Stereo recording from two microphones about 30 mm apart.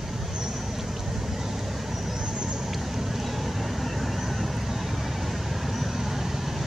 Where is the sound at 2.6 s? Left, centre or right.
Centre.